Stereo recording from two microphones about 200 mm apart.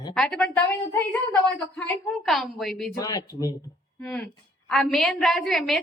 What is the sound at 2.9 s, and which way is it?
Speech, 20° left (ahead or behind).